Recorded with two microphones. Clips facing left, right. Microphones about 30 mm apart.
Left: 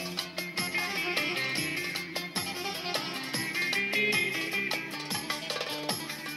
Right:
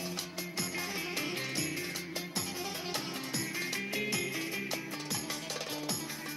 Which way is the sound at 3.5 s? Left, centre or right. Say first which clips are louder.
Left 10 dB; left.